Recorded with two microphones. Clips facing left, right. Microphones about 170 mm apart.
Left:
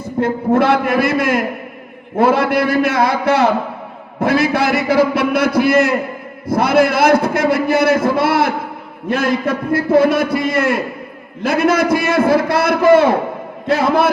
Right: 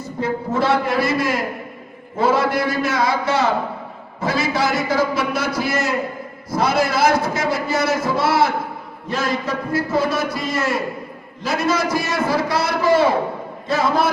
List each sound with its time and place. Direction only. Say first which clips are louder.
0.0 s a man's voice: left 6 dB; 55° left (ahead or behind)